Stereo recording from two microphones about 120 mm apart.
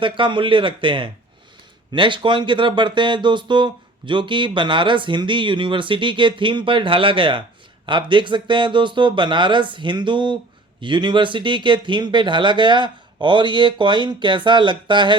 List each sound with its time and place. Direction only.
0.0 s speech: 45° right (ahead or behind)